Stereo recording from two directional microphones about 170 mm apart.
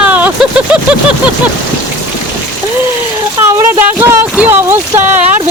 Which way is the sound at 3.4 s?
15° right (ahead or behind).